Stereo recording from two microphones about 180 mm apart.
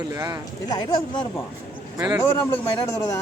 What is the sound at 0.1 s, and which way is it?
Speech, 20° right (ahead or behind).